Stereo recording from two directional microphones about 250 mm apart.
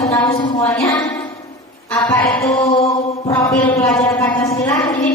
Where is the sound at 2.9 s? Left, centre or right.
Centre.